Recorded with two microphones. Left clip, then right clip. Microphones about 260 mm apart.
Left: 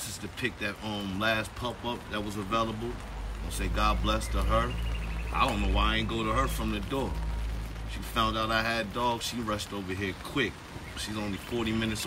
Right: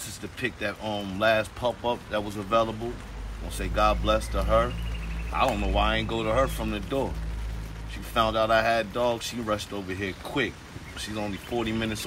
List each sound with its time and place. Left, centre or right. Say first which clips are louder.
0.4 s speech: right 3 dB; centre
8.1 s speech: right 6 dB; centre